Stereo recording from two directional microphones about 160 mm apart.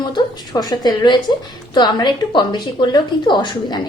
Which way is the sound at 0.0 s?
30° left (ahead or behind).